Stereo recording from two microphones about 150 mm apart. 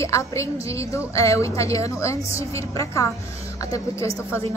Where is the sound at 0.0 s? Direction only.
20° left (ahead or behind).